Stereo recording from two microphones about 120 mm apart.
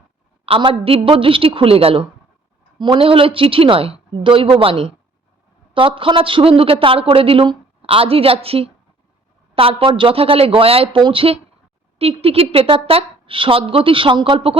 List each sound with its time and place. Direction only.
0.4 s speech: 55° right (ahead or behind)
2.7 s speech: 40° right (ahead or behind)